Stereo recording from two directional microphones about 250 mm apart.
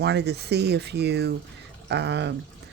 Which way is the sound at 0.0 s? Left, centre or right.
Right.